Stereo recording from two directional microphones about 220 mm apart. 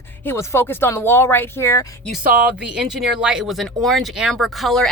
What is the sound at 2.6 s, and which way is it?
Speech, 5° right (ahead or behind).